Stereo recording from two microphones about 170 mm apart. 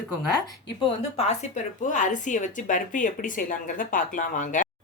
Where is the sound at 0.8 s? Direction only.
35° left (ahead or behind).